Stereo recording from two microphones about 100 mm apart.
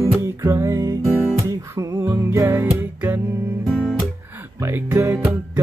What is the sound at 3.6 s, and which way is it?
Guitar, 5° left (ahead or behind).